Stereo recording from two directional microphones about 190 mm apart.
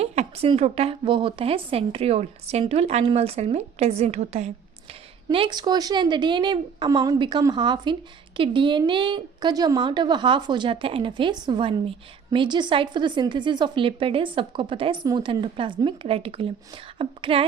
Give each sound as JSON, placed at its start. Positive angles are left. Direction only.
{"t": 0.0, "sound": "a woman's voice", "side_deg": -35}